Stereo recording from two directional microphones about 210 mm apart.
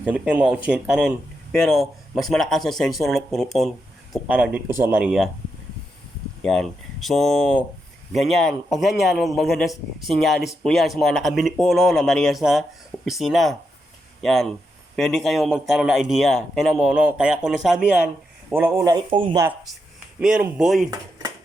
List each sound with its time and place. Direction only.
0.0 s a man's voice: 5° right (ahead or behind)
6.4 s a man's voice: 5° left (ahead or behind); by 19.4 s 25° right (ahead or behind)
20.1 s a man's voice: 5° right (ahead or behind)